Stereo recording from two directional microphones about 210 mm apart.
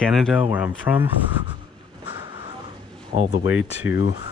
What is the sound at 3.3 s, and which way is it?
Speech, 75° left (ahead or behind).